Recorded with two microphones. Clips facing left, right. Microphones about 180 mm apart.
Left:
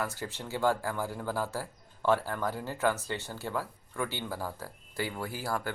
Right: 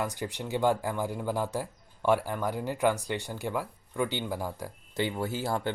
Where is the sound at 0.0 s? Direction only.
15° right (ahead or behind).